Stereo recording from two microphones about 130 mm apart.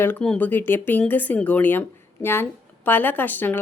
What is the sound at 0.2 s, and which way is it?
A woman's voice, 10° left (ahead or behind).